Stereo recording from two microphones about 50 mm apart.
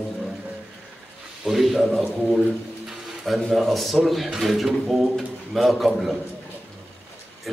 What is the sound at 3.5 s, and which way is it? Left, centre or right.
A man's voice, centre.